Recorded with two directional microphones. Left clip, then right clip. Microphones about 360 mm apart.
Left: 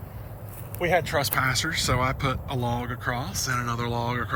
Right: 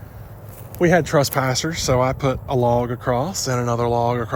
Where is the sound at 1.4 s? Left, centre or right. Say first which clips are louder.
Right 3 dB; centre.